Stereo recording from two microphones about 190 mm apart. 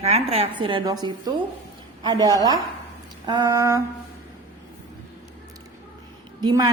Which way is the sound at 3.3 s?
20° right (ahead or behind).